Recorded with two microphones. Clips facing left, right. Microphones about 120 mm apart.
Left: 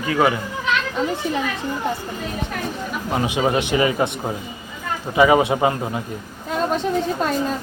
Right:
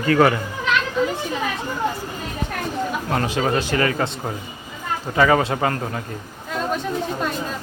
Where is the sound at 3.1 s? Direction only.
10° left (ahead or behind).